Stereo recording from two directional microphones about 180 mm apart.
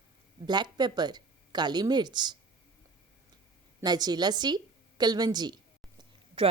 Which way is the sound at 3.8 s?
20° right (ahead or behind).